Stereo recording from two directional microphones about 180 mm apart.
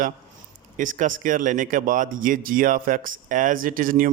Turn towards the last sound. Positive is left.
turn(degrees=-50)  # may be behind; listen again after turning